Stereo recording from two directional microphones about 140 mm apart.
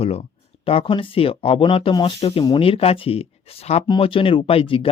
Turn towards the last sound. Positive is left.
turn(degrees=40)  # may be behind; listen again after turning